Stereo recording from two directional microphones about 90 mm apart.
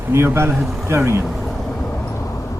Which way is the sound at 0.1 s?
30° right (ahead or behind).